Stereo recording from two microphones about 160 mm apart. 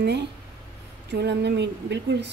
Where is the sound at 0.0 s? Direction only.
90° right.